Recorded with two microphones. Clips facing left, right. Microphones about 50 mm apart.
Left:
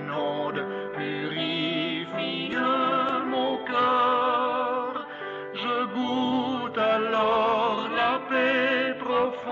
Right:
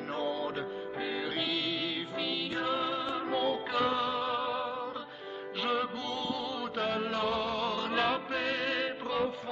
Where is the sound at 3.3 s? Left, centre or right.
Centre; by 4.9 s left.